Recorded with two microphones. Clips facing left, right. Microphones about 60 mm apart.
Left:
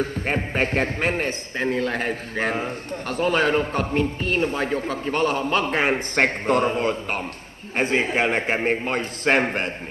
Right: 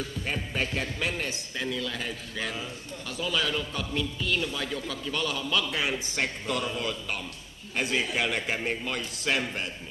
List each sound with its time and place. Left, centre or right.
0.0 s a man's voice: left